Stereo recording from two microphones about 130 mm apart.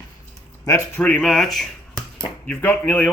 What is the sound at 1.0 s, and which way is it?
Speech, 5° left (ahead or behind).